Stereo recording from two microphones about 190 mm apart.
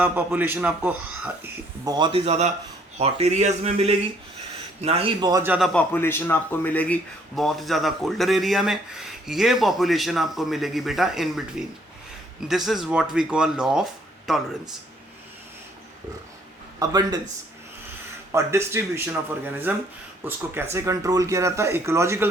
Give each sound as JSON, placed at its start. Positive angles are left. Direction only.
{"t": 0.0, "sound": "speech", "side_deg": -10}
{"t": 1.8, "sound": "a man's voice", "side_deg": -20}
{"t": 5.4, "sound": "speech", "side_deg": -5}
{"t": 5.9, "sound": "speech", "side_deg": 10}
{"t": 16.8, "sound": "speech", "side_deg": -20}
{"t": 18.3, "sound": "speech", "side_deg": -15}